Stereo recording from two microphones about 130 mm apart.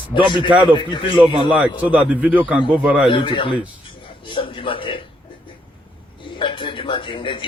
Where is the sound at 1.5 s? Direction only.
10° right (ahead or behind).